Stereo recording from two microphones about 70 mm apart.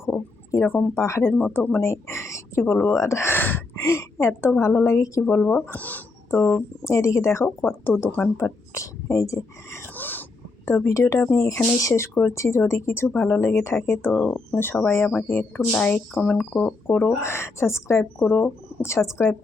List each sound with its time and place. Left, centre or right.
0.0 s a sound: left
0.9 s speech: left
3.8 s speech: left
5.4 s speech: centre
6.8 s speech: left
7.4 s speech: left
8.4 s speech: left
9.9 s a sound: left
10.7 s speech: left
14.1 s speech: left
15.7 s speech: left
17.1 s speech: left
18.2 s speech: left